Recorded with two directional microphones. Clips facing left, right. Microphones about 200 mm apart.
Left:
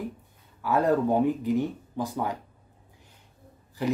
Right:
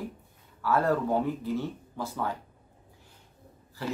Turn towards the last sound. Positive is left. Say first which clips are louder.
# left 7 dB
turn(degrees=15)  # may be behind; listen again after turning